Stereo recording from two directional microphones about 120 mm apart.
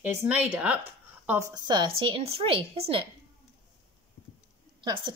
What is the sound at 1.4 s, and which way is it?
A woman's voice, 30° right (ahead or behind).